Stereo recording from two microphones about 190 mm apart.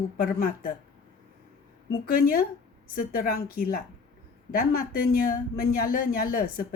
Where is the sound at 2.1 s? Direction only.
50° left (ahead or behind).